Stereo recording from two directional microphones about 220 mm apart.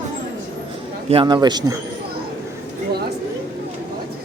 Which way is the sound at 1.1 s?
20° right (ahead or behind).